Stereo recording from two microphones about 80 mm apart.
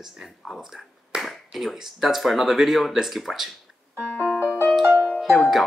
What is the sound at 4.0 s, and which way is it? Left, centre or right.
Music, centre.